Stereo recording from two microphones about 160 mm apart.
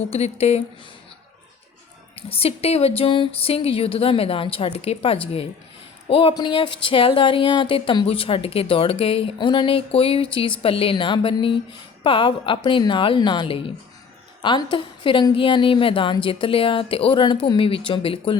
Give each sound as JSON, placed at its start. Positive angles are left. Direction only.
{"t": 0.1, "sound": "speech", "side_deg": 40}
{"t": 2.3, "sound": "speech", "side_deg": 40}